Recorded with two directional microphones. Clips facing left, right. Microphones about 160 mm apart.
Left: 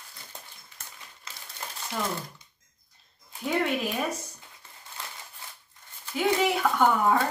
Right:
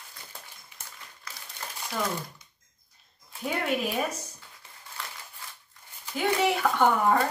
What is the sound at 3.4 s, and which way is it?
Speech, centre (ahead or behind).